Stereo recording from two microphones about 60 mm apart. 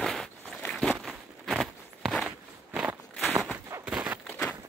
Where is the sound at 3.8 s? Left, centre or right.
Right.